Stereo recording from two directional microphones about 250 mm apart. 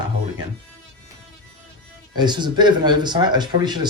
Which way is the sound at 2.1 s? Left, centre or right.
Centre.